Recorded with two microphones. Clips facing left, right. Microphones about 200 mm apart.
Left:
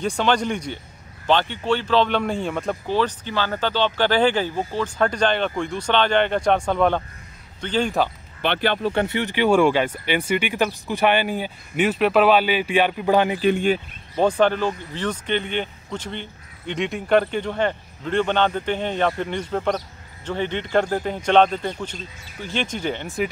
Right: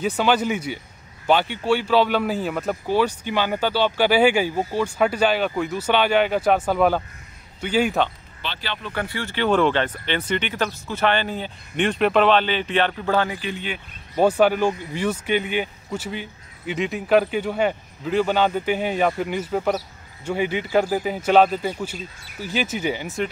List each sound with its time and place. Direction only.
0.0 s a man's voice: 5° right (ahead or behind)
8.4 s speech: 55° left (ahead or behind)
8.9 s speech: 20° left (ahead or behind)
13.5 s speech: 50° left (ahead or behind)
14.1 s a man's voice: 10° right (ahead or behind)